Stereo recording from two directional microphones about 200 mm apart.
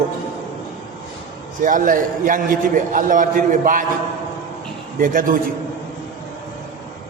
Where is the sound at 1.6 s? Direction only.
40° right (ahead or behind).